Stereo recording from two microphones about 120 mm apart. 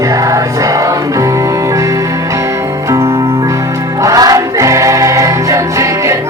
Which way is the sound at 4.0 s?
30° right (ahead or behind).